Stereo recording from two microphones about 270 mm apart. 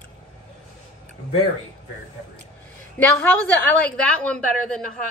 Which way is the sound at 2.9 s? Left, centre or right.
Centre.